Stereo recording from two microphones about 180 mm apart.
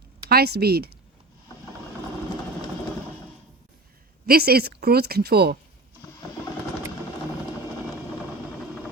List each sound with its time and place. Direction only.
0.3 s speech: 60° right (ahead or behind)
4.3 s speech: 60° right (ahead or behind)